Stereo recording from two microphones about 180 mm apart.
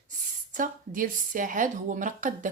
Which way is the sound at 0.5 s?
50° right (ahead or behind).